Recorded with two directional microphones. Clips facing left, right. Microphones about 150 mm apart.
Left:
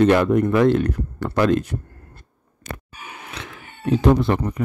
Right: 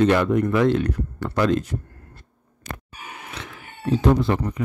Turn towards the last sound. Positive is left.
turn(degrees=60)  # may be behind; listen again after turning